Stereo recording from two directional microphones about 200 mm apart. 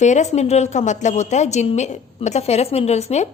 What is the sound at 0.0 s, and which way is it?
A woman's voice, 35° left (ahead or behind).